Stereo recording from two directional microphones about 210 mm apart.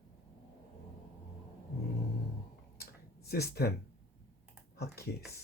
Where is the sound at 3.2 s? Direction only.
50° left (ahead or behind).